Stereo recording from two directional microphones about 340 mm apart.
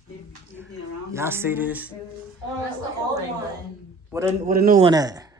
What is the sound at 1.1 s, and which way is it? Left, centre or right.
Speech, centre.